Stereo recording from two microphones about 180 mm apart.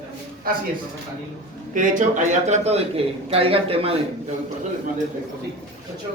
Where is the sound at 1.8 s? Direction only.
45° right (ahead or behind).